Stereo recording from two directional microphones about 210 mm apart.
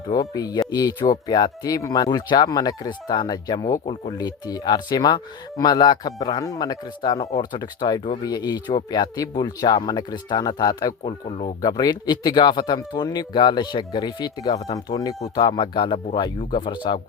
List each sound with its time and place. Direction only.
0.1 s speech: 15° left (ahead or behind)